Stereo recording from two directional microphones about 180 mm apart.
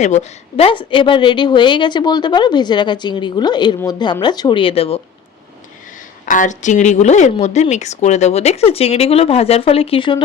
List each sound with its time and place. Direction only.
0.0 s a woman's voice: 40° left (ahead or behind)
6.2 s a woman's voice: 45° left (ahead or behind); by 10.2 s 25° left (ahead or behind)